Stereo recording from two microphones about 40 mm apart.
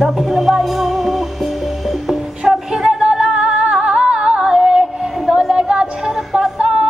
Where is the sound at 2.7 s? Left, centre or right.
Centre.